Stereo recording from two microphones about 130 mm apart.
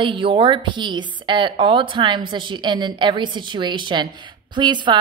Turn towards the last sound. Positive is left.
turn(degrees=-35)  # may be behind; listen again after turning